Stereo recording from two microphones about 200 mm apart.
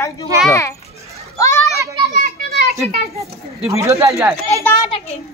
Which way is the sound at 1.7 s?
15° right (ahead or behind).